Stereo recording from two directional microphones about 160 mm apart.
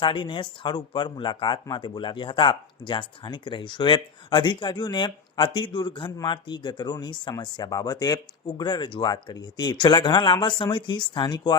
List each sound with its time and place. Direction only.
0.0 s speech: 30° left (ahead or behind)